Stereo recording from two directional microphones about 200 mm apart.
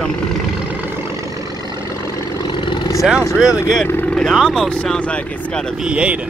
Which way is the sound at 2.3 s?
25° left (ahead or behind).